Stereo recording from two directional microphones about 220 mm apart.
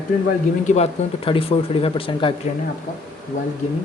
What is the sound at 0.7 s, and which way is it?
Speech, 25° left (ahead or behind).